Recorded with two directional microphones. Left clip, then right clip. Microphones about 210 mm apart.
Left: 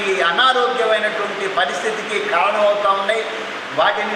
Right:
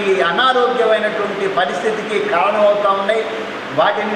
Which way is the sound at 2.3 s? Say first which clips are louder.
Right 2 dB; 15° right (ahead or behind).